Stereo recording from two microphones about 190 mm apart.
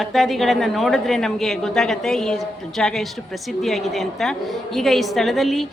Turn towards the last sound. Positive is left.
turn(degrees=0)  # may be behind; listen again after turning